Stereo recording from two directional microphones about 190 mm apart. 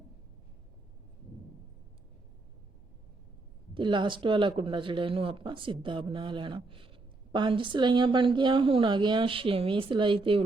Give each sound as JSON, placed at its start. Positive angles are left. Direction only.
{"t": 3.8, "sound": "speech", "side_deg": -25}